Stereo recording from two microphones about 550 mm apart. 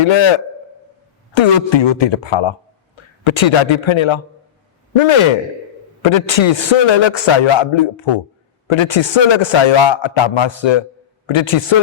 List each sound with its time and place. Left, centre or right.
0.0 s a man's voice: left